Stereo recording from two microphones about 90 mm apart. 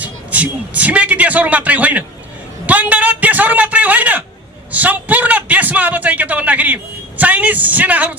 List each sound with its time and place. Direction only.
0.0 s a man's voice: 15° right (ahead or behind)
2.6 s a sound: 15° right (ahead or behind)
4.7 s a man's voice: 15° right (ahead or behind)